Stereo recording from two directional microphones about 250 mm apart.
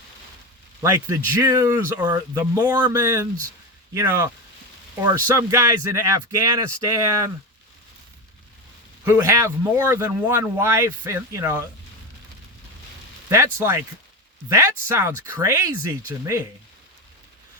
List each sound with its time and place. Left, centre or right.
0.8 s speech: centre
9.0 s speech: centre
13.2 s speech: centre